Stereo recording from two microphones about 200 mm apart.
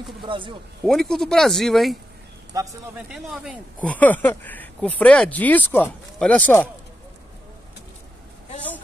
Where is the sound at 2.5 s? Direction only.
15° right (ahead or behind).